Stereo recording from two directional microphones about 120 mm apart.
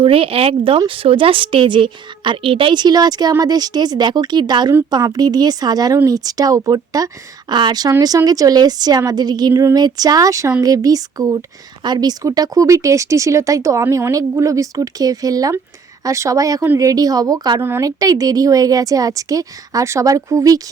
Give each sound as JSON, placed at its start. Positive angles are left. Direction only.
{"t": 0.0, "sound": "a woman's voice", "side_deg": -50}
{"t": 17.6, "sound": "speech", "side_deg": -20}
{"t": 17.8, "sound": "speech", "side_deg": -30}